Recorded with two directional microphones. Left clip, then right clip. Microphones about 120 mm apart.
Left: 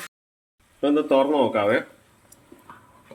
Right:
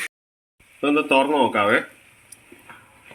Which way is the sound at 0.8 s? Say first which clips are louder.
Right 1 dB; 5° right (ahead or behind).